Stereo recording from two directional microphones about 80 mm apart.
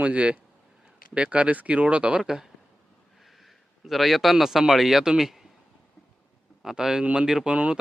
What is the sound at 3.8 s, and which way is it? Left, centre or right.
Speech, centre.